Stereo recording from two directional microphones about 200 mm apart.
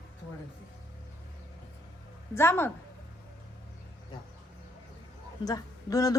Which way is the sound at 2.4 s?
10° left (ahead or behind).